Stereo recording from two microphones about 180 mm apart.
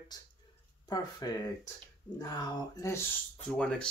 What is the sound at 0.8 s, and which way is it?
Speech, 20° left (ahead or behind).